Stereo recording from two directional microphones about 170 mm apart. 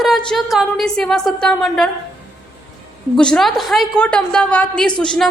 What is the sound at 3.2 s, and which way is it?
A woman's voice, 5° left (ahead or behind).